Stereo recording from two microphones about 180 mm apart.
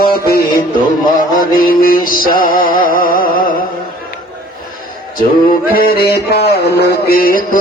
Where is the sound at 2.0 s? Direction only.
50° left (ahead or behind).